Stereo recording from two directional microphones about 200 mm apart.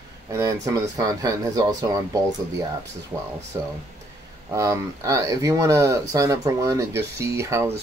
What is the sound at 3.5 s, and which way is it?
Speech, 20° right (ahead or behind).